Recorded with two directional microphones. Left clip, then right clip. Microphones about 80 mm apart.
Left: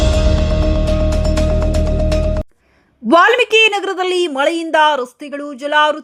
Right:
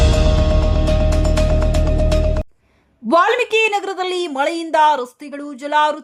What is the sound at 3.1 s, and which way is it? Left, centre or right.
A woman's voice, left.